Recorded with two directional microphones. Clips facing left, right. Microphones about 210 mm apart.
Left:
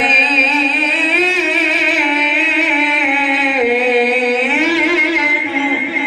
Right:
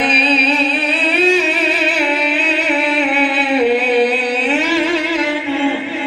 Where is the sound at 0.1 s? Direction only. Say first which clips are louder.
Right 2 dB; 35° right (ahead or behind).